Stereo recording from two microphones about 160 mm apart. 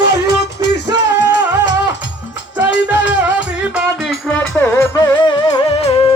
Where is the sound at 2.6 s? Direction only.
10° right (ahead or behind).